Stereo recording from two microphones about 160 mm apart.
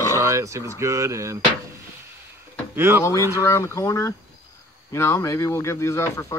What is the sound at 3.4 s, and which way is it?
Speech, 20° left (ahead or behind).